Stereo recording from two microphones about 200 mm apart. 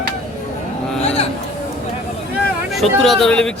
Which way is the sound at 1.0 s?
30° left (ahead or behind).